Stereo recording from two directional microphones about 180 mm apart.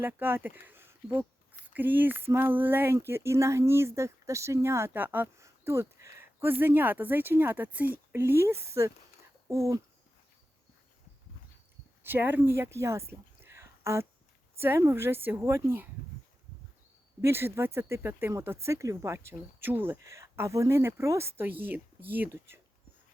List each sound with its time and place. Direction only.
0.0 s speech: 10° right (ahead or behind)
12.0 s speech: 10° right (ahead or behind)
17.2 s speech: 15° right (ahead or behind)